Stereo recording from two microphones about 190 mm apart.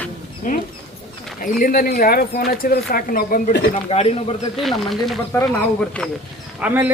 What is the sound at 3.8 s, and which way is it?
Speech, 30° left (ahead or behind).